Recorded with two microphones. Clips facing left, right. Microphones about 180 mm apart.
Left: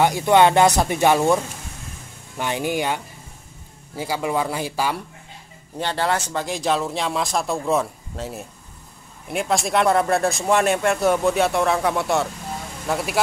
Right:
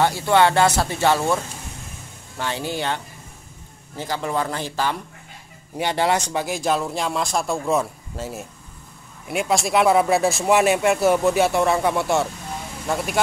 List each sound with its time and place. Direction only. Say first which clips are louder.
0.0 s speech: left 2 dB; 15° left (ahead or behind)
5.8 s speech: right 2 dB; 15° right (ahead or behind)
6.3 s speech: even; 5° right (ahead or behind)